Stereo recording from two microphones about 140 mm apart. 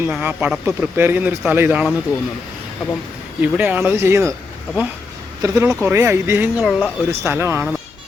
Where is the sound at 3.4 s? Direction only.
15° right (ahead or behind).